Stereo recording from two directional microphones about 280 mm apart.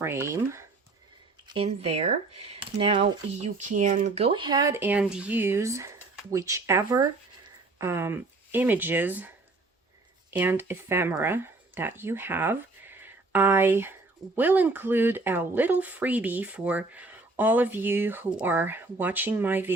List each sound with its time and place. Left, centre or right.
0.0 s speech: centre
1.5 s speech: right
10.3 s speech: centre